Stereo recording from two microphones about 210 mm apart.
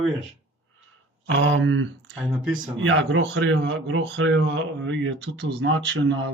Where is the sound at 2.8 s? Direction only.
65° right (ahead or behind).